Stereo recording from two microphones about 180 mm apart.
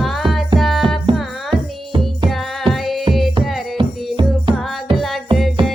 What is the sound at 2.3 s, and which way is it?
Music, centre (ahead or behind).